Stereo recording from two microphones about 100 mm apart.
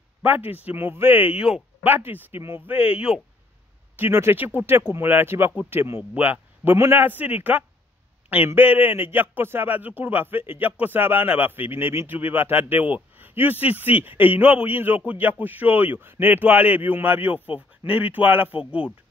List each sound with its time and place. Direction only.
0.2 s a man's voice: 20° right (ahead or behind)
3.9 s a man's voice: 25° right (ahead or behind)